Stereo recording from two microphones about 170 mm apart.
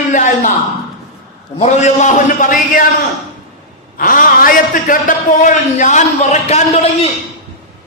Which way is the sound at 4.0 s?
55° left (ahead or behind).